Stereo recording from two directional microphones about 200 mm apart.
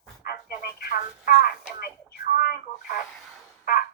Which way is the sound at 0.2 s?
50° left (ahead or behind).